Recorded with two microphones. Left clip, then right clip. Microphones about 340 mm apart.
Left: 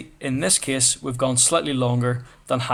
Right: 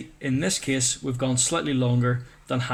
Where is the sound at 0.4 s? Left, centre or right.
Centre.